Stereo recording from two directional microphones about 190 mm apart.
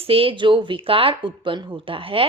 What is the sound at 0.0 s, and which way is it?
A woman's voice, 30° right (ahead or behind).